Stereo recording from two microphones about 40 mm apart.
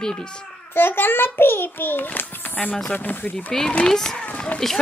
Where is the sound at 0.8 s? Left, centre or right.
Left.